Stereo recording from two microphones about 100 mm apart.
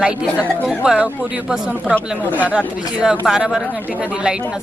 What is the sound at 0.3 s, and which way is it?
Speech, 15° left (ahead or behind).